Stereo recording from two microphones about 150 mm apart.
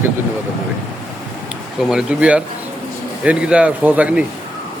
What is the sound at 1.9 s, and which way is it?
Speech, 10° right (ahead or behind).